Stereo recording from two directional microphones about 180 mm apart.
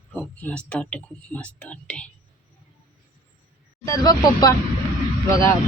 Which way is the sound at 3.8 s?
20° left (ahead or behind).